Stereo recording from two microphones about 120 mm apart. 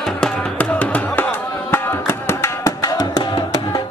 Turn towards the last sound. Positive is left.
turn(degrees=35)  # may be behind; listen again after turning